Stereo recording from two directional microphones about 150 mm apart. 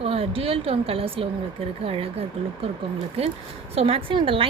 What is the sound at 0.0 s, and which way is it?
A woman's voice, 40° right (ahead or behind).